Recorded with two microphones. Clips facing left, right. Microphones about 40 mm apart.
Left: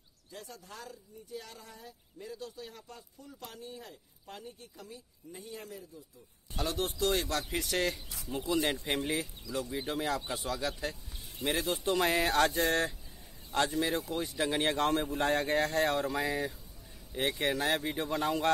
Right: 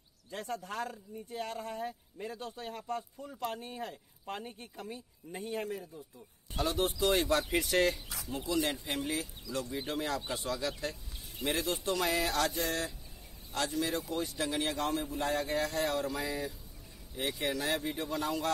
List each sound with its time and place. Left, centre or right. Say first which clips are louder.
0.3 s speech: right 8 dB; right
6.5 s speech: right 2 dB; centre
8.3 s speech: left 2 dB; centre
8.8 s speech: left 3 dB; left
9.1 s speech: left 2 dB; centre; by 12.4 s left
12.4 s a sound: left 5 dB; left
13.5 s speech: left 3 dB; left
14.6 s speech: left 5 dB; left